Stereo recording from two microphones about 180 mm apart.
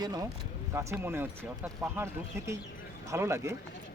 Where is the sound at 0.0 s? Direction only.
20° right (ahead or behind).